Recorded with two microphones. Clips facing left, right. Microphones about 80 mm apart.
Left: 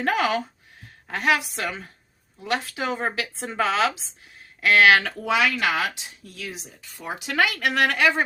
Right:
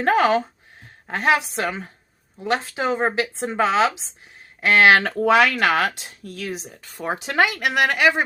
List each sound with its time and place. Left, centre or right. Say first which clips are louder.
0.0 s speech: right 5 dB; right
5.2 s speech: right 6 dB; right
7.2 s speech: right 2 dB; right; by 8.2 s centre